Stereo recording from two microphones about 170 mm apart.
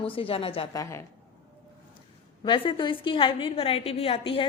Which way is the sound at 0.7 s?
20° left (ahead or behind).